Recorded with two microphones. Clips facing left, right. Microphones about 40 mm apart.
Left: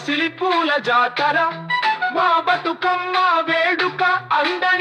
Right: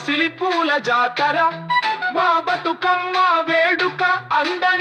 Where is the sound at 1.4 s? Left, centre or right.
Centre.